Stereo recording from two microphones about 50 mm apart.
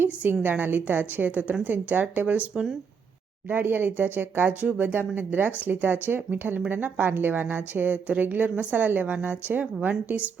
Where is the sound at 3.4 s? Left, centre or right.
Right.